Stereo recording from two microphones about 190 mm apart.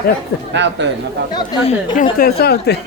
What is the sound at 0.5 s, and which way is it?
Speech, 70° right (ahead or behind).